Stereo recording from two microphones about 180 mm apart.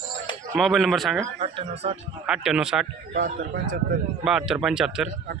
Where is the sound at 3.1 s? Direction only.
50° right (ahead or behind).